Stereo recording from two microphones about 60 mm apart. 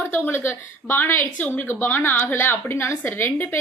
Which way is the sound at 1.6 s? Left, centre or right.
Left.